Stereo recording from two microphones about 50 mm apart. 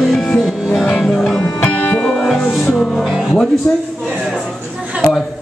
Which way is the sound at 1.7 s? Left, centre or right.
Left.